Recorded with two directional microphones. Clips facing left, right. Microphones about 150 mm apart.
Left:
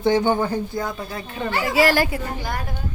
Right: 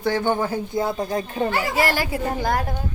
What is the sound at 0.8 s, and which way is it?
Speech, 35° right (ahead or behind).